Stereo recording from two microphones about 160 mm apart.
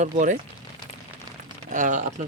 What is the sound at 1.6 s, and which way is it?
Speech, 55° right (ahead or behind).